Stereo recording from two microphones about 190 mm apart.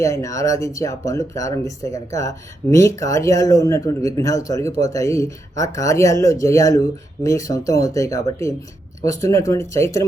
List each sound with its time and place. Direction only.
0.0 s speech: 15° left (ahead or behind)